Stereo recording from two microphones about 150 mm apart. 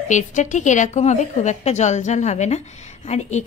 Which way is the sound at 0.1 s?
55° left (ahead or behind).